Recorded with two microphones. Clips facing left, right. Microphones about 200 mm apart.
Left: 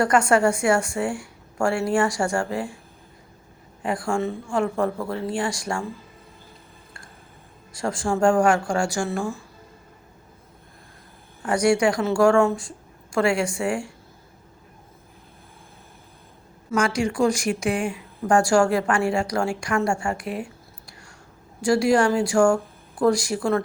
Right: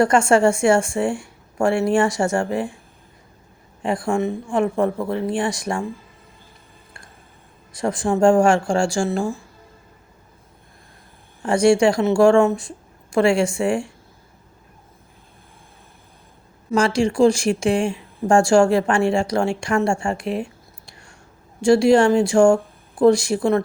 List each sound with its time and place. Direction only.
0.0 s a woman's voice: 25° right (ahead or behind)
3.8 s a woman's voice: 20° right (ahead or behind)
7.7 s a woman's voice: 20° right (ahead or behind)
11.4 s a woman's voice: 25° right (ahead or behind)
16.7 s a woman's voice: 30° right (ahead or behind)